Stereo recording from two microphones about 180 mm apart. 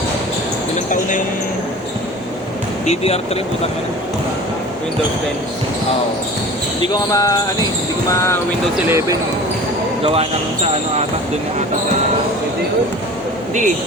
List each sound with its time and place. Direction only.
2.8 s speech: 35° left (ahead or behind)
6.9 s basketball bounce: 20° left (ahead or behind)
8.1 s speech: 15° left (ahead or behind)
8.9 s speech: 15° right (ahead or behind)
10.0 s speech: 35° right (ahead or behind)